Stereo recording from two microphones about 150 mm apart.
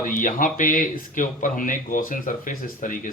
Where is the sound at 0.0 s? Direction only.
60° left (ahead or behind).